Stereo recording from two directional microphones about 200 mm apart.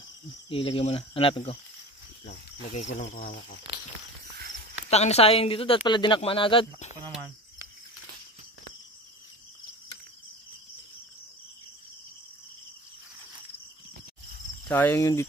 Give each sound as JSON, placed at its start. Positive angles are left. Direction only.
{"t": 0.5, "sound": "speech", "side_deg": 25}
{"t": 3.7, "sound": "a sound", "side_deg": -25}
{"t": 4.8, "sound": "speech", "side_deg": 30}
{"t": 14.7, "sound": "speech", "side_deg": 10}